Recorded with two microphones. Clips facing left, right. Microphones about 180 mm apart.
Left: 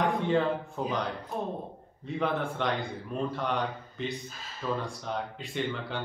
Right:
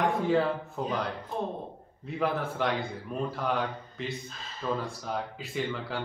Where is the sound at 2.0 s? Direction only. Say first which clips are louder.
Even; 5° right (ahead or behind).